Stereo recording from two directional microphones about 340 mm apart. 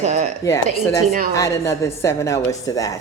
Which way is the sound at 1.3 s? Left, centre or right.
Centre.